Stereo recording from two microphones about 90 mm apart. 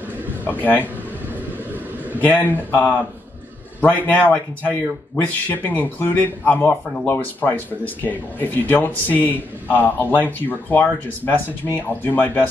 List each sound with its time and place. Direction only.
2.1 s speech: 20° left (ahead or behind)